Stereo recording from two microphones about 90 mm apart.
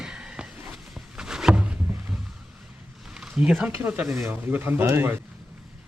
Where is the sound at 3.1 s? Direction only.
10° right (ahead or behind).